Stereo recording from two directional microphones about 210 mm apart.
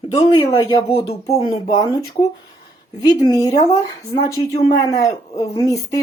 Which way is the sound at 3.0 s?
20° left (ahead or behind).